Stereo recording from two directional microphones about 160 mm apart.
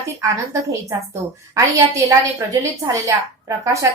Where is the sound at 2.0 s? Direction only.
20° right (ahead or behind).